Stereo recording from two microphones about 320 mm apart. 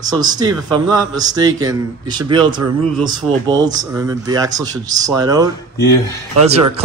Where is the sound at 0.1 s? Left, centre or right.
Centre.